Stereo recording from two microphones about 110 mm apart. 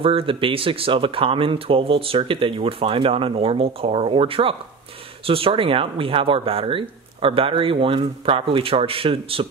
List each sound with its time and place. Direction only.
0.0 s speech: 55° right (ahead or behind)